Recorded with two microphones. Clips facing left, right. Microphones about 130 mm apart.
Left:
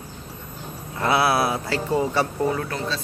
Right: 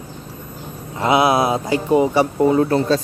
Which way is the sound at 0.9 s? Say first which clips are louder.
Right 5 dB; 20° right (ahead or behind).